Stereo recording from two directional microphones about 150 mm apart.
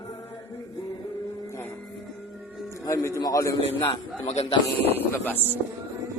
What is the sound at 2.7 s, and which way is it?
A man's voice, 20° left (ahead or behind).